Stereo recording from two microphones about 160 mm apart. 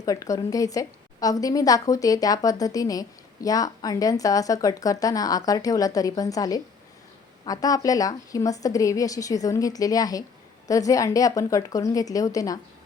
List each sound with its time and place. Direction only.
0.0 s a woman's voice: 20° left (ahead or behind)